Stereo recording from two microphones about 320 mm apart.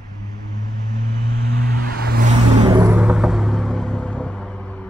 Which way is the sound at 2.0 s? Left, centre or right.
Right.